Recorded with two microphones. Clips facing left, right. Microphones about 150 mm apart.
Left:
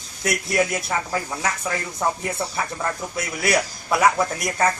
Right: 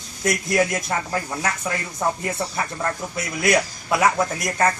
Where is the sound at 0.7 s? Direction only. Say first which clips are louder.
Even; centre (ahead or behind).